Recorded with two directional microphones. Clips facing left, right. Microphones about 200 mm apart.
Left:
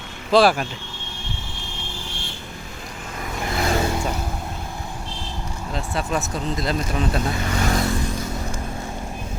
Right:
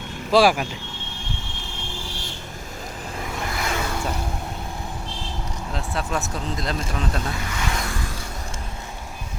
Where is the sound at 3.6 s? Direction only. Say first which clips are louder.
Left 7 dB; 35° left (ahead or behind).